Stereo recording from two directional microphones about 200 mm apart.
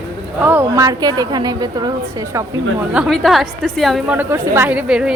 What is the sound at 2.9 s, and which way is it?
A woman's voice, centre (ahead or behind).